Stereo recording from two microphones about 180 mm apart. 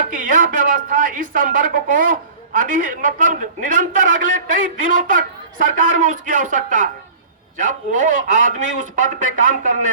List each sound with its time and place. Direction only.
0.0 s speech: 50° right (ahead or behind)